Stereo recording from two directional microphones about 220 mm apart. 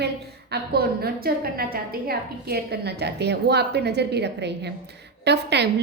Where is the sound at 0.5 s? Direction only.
45° right (ahead or behind).